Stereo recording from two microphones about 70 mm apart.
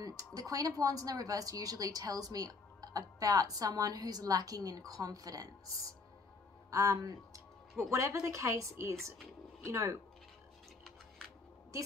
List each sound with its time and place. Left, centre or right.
0.0 s a woman's voice: right